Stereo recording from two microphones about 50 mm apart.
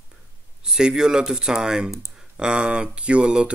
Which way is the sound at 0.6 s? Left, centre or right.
Centre.